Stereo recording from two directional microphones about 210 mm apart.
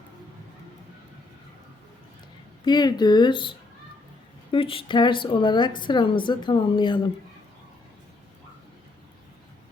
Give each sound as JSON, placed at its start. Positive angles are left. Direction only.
{"t": 2.6, "sound": "a woman's voice", "side_deg": 20}
{"t": 4.5, "sound": "a woman's voice", "side_deg": 25}